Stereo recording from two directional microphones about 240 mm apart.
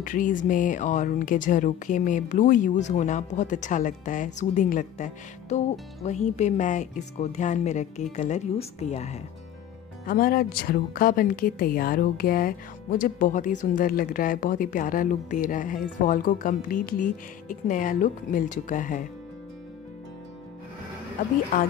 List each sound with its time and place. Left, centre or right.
0.0 s speech: left
21.2 s speech: left